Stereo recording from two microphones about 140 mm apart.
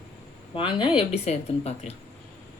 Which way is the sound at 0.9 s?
45° left (ahead or behind).